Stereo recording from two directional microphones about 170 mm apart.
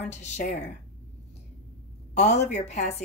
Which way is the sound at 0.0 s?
45° left (ahead or behind).